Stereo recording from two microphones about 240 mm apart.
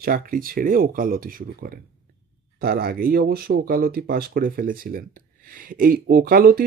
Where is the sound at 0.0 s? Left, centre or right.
Right.